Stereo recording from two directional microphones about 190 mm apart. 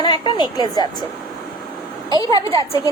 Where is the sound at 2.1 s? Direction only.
20° left (ahead or behind).